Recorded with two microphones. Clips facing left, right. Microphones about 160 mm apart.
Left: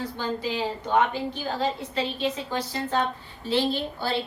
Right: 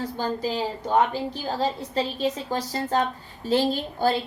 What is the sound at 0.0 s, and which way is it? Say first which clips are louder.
A woman's voice: right 2 dB; 40° right (ahead or behind).